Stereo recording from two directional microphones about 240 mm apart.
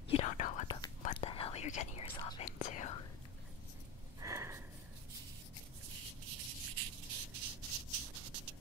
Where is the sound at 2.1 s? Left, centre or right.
Centre.